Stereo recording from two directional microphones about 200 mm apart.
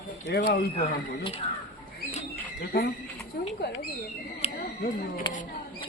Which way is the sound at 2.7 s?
50° left (ahead or behind).